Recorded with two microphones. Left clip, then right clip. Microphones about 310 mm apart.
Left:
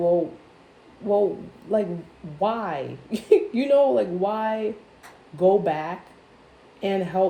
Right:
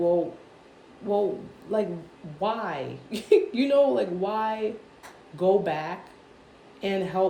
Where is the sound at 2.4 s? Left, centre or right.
Centre.